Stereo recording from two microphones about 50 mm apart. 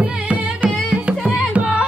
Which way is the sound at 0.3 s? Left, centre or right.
Right.